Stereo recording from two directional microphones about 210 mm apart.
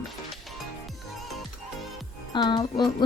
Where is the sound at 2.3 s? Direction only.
20° left (ahead or behind).